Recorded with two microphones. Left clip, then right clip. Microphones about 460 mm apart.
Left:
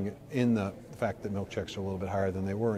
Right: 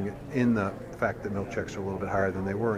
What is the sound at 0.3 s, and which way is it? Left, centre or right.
A man's voice, left.